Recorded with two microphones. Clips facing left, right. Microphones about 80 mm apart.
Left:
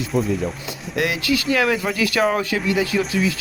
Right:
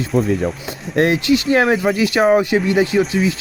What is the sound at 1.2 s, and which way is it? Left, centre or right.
Speech, right.